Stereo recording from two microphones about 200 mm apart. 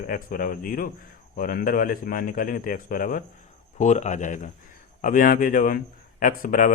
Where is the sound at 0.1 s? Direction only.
45° left (ahead or behind).